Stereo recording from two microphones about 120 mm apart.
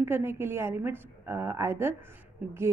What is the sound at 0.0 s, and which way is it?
Speech, 20° right (ahead or behind).